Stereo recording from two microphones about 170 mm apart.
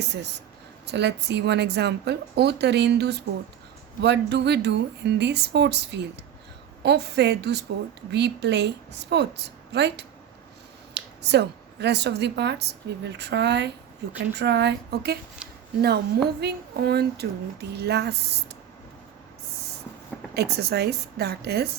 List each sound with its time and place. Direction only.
0.0 s speech: 85° right
4.0 s speech: 90° right
20.3 s speech: 70° right (ahead or behind)